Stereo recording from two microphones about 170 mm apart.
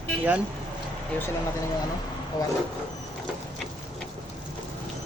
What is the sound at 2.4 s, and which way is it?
Speech, 25° left (ahead or behind).